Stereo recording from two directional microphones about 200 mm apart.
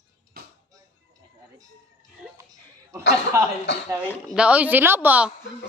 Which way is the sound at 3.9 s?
5° right (ahead or behind).